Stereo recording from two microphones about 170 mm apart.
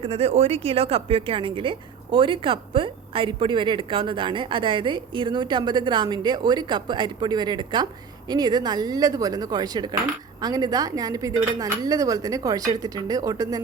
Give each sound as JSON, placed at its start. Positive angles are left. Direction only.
{"t": 0.0, "sound": "speech", "side_deg": -35}